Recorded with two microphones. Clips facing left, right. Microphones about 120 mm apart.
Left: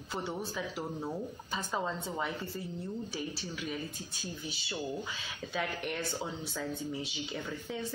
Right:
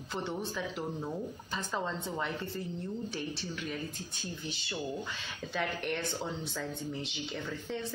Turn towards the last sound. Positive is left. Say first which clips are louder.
# right 1 dB
turn(degrees=5)  # may be behind; listen again after turning